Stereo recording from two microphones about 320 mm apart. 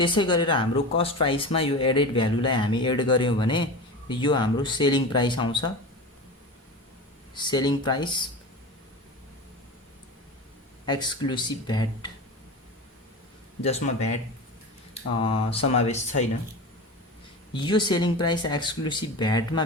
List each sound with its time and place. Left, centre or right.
0.0 s speech: centre
7.3 s speech: centre
10.8 s speech: centre
13.6 s speech: centre
15.2 s speech: centre
17.6 s speech: centre